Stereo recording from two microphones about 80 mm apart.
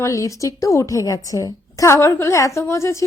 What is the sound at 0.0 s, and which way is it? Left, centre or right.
A woman's voice, left.